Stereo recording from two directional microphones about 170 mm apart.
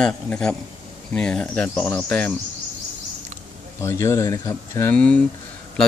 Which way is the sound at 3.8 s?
15° left (ahead or behind).